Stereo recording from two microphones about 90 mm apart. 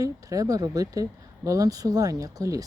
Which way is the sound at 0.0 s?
40° right (ahead or behind).